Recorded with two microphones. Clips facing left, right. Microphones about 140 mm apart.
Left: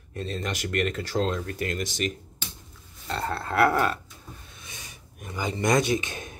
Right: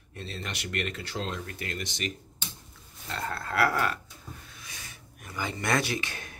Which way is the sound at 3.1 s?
25° left (ahead or behind).